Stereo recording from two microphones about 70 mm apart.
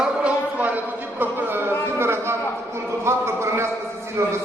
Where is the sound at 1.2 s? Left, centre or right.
Right.